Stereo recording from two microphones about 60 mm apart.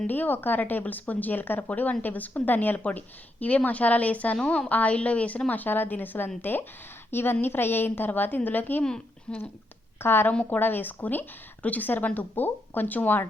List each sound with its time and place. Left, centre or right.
0.1 s speech: left
4.4 s a woman's voice: centre
4.7 s a woman's voice: left
9.3 s a woman's voice: centre
10.0 s speech: left